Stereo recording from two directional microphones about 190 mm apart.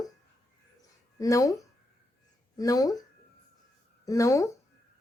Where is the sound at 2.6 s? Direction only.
20° left (ahead or behind).